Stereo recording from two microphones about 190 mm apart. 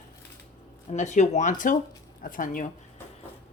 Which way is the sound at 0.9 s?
40° left (ahead or behind).